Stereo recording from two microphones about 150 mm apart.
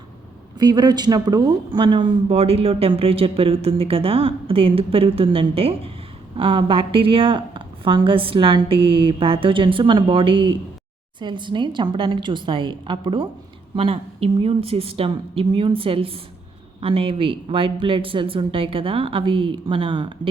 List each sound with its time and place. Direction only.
0.6 s speech: 30° right (ahead or behind)